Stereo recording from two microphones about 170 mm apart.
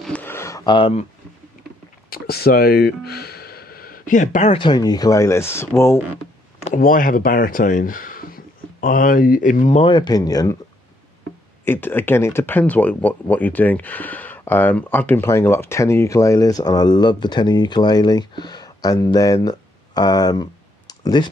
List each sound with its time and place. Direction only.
0.0 s a sound: 10° left (ahead or behind); by 1.0 s 30° left (ahead or behind)
2.0 s speech: 65° left (ahead or behind); by 4.6 s 45° left (ahead or behind)
4.6 s speech: 25° left (ahead or behind)
6.6 s speech: 50° left (ahead or behind)
9.8 s speech: 25° left (ahead or behind)
11.6 s speech: 10° left (ahead or behind)